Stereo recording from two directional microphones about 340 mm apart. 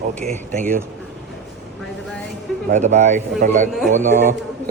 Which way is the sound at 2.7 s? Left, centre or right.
Right.